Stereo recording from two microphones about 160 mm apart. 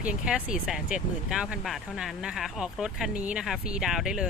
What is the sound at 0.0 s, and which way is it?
Speech, 5° right (ahead or behind).